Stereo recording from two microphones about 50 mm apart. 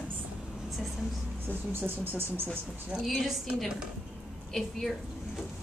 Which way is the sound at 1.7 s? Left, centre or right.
Right.